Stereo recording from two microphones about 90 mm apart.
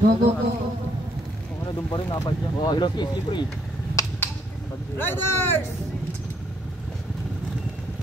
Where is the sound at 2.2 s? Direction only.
55° left (ahead or behind).